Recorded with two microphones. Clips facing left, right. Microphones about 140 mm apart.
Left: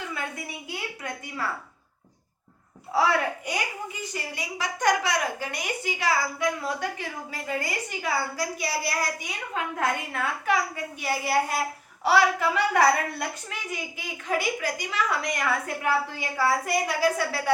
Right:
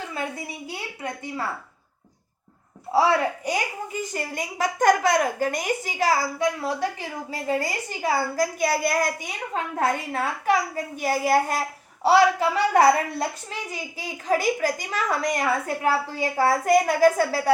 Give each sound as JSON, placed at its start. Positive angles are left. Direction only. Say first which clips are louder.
{"t": 0.7, "sound": "a woman's voice", "louder": "right 1 dB", "side_deg": -30}
{"t": 2.9, "sound": "a woman's voice", "louder": "right 3 dB", "side_deg": -30}
{"t": 4.1, "sound": "a woman's voice", "louder": "right 4 dB", "side_deg": -45}
{"t": 6.4, "sound": "a woman's voice", "louder": "right 3 dB", "side_deg": -30}
{"t": 9.7, "sound": "a woman's voice", "louder": "right 5 dB", "side_deg": -35}
{"t": 11.0, "sound": "a woman's voice", "louder": "right 4 dB", "side_deg": -45}
{"t": 12.0, "sound": "a woman's voice", "louder": "right 4 dB", "side_deg": -30}
{"t": 16.5, "sound": "a woman's voice", "louder": "right 7 dB", "side_deg": -45}